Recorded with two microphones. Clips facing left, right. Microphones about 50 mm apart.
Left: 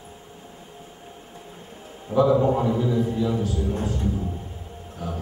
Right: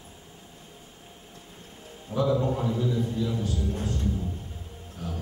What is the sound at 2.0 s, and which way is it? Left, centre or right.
A man's voice, left.